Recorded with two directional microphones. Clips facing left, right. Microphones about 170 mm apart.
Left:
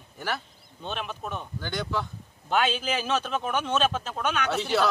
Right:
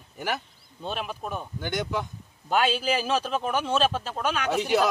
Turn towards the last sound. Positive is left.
turn(degrees=-15)  # may be behind; listen again after turning